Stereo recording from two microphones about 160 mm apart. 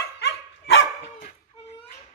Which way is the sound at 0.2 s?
90° left.